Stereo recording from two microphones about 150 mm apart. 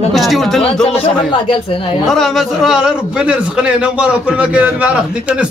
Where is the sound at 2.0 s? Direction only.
Centre (ahead or behind).